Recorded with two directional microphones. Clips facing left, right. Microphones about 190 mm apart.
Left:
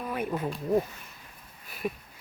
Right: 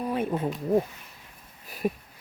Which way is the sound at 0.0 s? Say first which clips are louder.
Right 4 dB; 30° right (ahead or behind).